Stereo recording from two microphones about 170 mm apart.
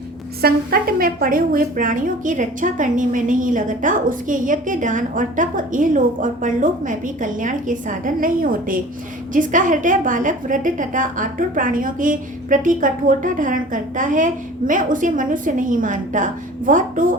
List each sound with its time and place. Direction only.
0.4 s a woman's voice: 60° right (ahead or behind)